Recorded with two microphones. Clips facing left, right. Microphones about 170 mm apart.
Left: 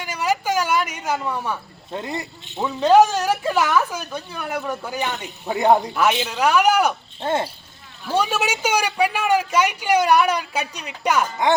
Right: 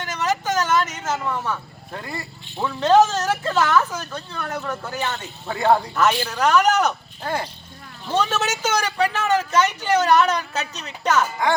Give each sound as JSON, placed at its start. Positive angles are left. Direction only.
{"t": 0.0, "sound": "speech", "side_deg": 10}
{"t": 7.2, "sound": "speech", "side_deg": 25}
{"t": 8.0, "sound": "speech", "side_deg": 10}